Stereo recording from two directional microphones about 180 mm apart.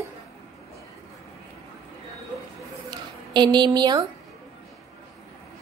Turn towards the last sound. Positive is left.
turn(degrees=-25)  # may be behind; listen again after turning